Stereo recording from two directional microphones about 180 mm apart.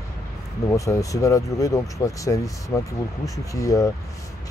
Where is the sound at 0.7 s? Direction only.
15° left (ahead or behind).